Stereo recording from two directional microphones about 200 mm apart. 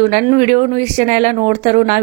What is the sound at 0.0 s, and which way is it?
A woman's voice, 40° right (ahead or behind).